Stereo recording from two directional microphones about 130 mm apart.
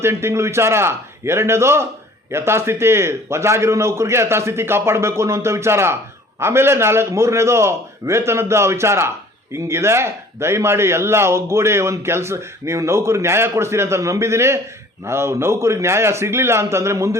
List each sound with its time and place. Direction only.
0.0 s a man's voice: 20° right (ahead or behind)